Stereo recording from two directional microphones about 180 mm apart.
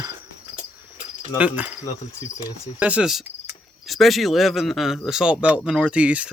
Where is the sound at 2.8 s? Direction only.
5° right (ahead or behind).